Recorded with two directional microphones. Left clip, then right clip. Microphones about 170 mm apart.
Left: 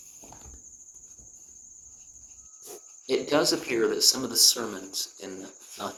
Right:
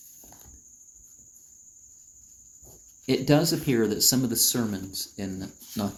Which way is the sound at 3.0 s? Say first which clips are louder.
Right 1 dB; 20° right (ahead or behind).